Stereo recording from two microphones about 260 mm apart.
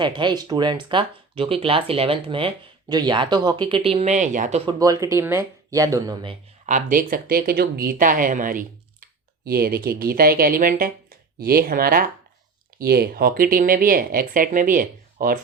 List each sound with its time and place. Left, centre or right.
0.0 s speech: centre
4.8 s speech: centre
6.7 s speech: right